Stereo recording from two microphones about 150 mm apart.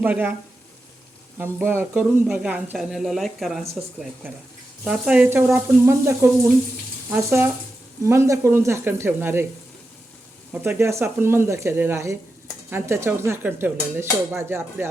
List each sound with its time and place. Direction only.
0.0 s dishes: 10° right (ahead or behind)
1.4 s dishes: 15° right (ahead or behind)
2.7 s speech: centre (ahead or behind)
4.9 s dishes: 10° right (ahead or behind)
10.5 s dishes: 10° right (ahead or behind)